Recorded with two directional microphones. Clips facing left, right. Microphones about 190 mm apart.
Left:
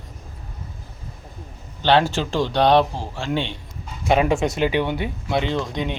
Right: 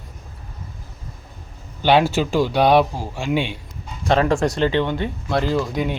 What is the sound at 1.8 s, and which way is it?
Speech, 10° right (ahead or behind).